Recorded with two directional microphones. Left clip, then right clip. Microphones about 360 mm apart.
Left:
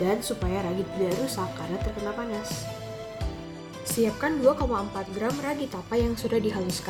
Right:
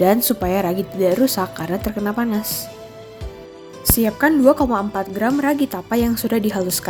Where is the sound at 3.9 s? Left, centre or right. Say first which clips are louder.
Right 9 dB; right.